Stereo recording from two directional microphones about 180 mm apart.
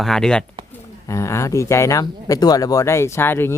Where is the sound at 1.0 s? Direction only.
15° left (ahead or behind).